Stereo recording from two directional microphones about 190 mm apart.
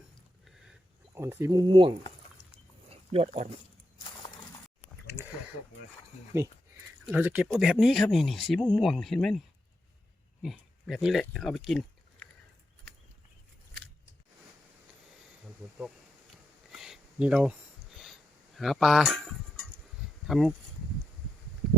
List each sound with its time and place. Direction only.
1.1 s speech: 15° right (ahead or behind)
2.9 s a sound: 30° right (ahead or behind)
6.3 s speech: 15° right (ahead or behind)
10.4 s speech: centre (ahead or behind)
16.3 s a sound: centre (ahead or behind)
20.2 s speech: centre (ahead or behind)